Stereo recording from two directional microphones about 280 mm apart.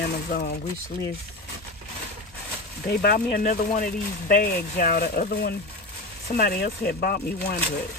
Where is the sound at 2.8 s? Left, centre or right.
Left.